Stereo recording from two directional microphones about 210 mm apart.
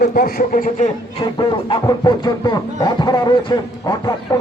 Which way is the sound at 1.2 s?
20° left (ahead or behind).